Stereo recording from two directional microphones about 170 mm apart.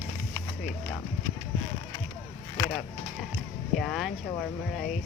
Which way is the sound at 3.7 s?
Centre (ahead or behind).